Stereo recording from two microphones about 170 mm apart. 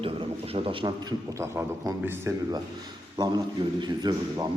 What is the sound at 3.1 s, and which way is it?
A man's voice, 25° right (ahead or behind).